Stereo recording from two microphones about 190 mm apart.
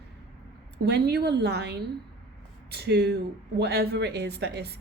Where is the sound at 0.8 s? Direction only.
60° right (ahead or behind).